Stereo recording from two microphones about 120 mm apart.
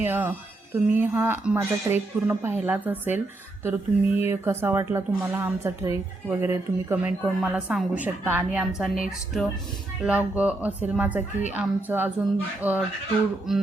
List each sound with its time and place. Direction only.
0.0 s a woman's voice: 15° right (ahead or behind)
7.0 s a woman's voice: 10° right (ahead or behind)
8.4 s a woman's voice: 5° right (ahead or behind)
10.0 s a woman's voice: 10° right (ahead or behind)